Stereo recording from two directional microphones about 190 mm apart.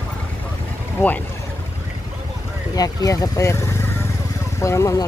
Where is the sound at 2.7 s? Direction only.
20° left (ahead or behind).